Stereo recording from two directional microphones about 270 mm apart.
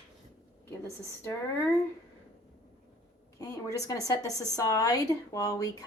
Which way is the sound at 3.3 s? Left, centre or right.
Centre.